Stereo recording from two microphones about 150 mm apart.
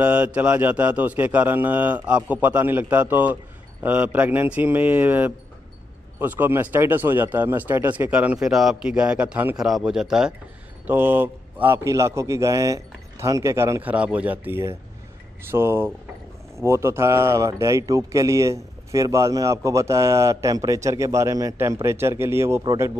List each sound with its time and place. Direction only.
0.0 s a man's voice: 10° right (ahead or behind)